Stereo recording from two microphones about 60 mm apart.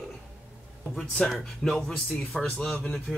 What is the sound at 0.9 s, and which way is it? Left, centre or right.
Speech, centre.